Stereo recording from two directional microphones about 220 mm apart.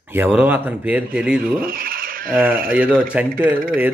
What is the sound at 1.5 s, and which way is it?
Speech, 40° right (ahead or behind).